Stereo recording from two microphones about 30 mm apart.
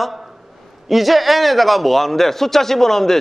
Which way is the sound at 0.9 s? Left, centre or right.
Centre.